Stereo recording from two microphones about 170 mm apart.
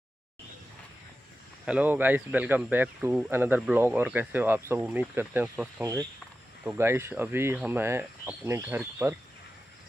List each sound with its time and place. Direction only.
1.7 s speech: 10° right (ahead or behind)